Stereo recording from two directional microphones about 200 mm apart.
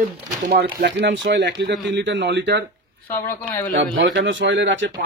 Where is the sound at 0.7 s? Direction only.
60° right (ahead or behind).